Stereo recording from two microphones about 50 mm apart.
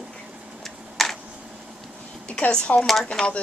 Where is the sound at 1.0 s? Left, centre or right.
Centre.